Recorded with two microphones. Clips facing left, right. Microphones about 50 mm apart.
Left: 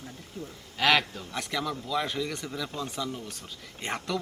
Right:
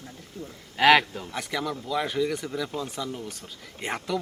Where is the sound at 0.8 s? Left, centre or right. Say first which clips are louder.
Right 6 dB; centre.